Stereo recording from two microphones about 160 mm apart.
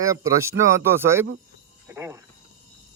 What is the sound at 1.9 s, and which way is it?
Cricket, 15° right (ahead or behind).